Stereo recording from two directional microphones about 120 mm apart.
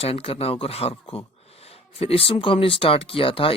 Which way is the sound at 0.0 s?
55° left (ahead or behind).